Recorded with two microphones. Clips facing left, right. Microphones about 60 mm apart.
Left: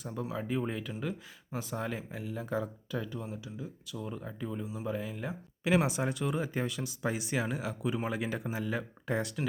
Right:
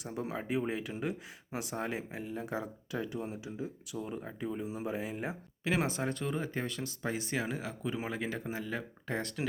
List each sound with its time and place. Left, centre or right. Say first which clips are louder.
0.1 s speech: even; right
0.4 s speech: right 2 dB; centre
2.2 s speech: left 2 dB; centre
3.2 s speech: right 2 dB; right
4.6 s speech: left 2 dB; right
6.0 s speech: left 2 dB; centre